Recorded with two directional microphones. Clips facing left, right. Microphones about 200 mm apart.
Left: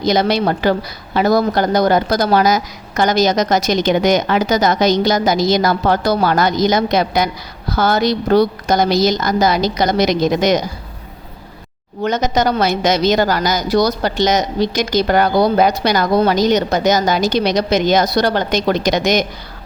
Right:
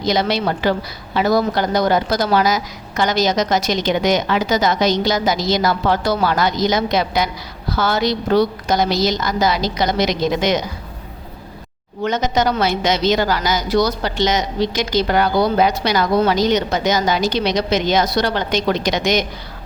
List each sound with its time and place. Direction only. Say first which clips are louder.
0.0 s a woman's voice: left 3 dB; 45° left (ahead or behind)
12.0 s a woman's voice: left 2 dB; 40° left (ahead or behind)